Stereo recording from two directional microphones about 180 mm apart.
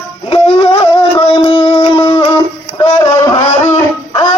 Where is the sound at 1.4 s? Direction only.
25° left (ahead or behind).